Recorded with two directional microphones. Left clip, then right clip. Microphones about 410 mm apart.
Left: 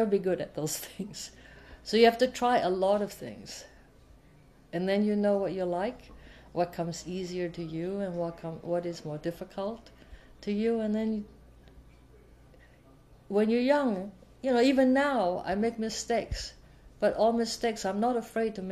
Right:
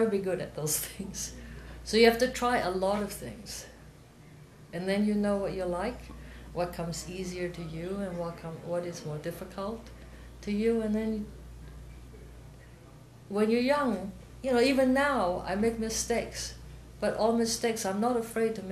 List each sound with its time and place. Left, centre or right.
0.1 s speech: left
4.6 s speech: left
13.3 s speech: left